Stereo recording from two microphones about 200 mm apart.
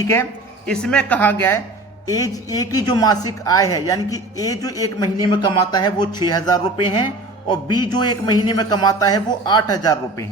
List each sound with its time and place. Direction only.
0.0 s speech: 15° left (ahead or behind)